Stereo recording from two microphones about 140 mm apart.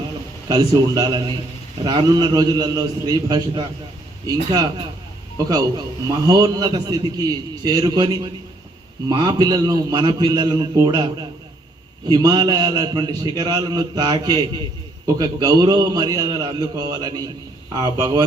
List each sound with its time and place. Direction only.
0.4 s a man's voice: 30° right (ahead or behind)
5.5 s a man's voice: 25° right (ahead or behind)